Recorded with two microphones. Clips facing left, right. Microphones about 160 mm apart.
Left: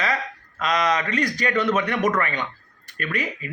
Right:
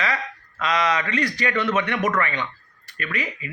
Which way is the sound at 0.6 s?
40° left (ahead or behind).